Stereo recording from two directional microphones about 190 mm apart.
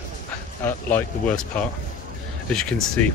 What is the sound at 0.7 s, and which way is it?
Speech, 10° left (ahead or behind).